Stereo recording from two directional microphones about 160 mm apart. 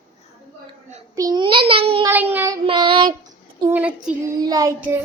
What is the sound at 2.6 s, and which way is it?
Speech, 30° right (ahead or behind).